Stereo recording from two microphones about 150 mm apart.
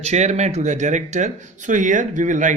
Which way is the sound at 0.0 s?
50° right (ahead or behind).